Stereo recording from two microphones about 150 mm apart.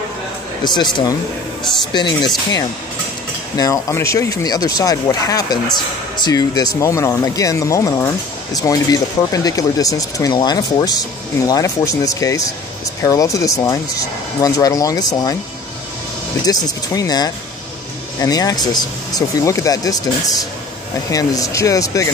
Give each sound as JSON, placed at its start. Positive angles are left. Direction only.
{"t": 0.7, "sound": "speech", "side_deg": 30}
{"t": 3.5, "sound": "speech", "side_deg": 25}
{"t": 16.4, "sound": "speech", "side_deg": 25}
{"t": 21.1, "sound": "speech", "side_deg": 25}